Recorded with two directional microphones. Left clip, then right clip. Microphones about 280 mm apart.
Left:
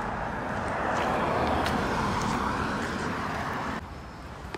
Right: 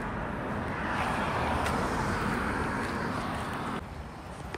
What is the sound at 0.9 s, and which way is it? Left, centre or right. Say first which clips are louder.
Vehicle: left 3 dB; left.